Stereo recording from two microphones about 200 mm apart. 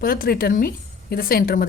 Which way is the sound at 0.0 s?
45° left (ahead or behind).